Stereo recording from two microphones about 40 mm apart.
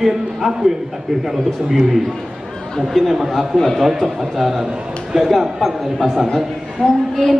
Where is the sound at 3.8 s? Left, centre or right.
Centre.